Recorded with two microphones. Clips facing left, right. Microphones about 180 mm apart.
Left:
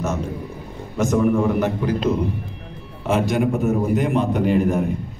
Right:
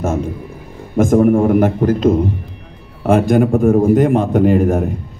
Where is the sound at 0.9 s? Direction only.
50° right (ahead or behind).